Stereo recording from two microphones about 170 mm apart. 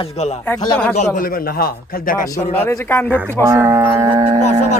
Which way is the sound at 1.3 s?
60° left (ahead or behind).